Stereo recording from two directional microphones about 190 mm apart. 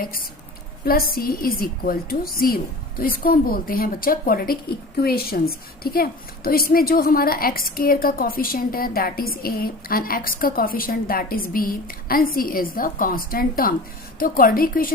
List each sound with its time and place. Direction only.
0.0 s a woman's voice: 50° left (ahead or behind)